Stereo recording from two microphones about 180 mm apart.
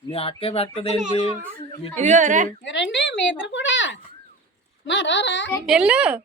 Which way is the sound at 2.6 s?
90° left.